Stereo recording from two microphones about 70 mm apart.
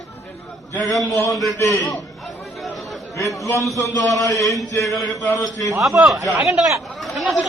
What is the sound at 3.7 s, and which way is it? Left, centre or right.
Speech, left.